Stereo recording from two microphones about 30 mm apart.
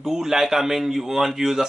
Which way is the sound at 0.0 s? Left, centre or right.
Centre.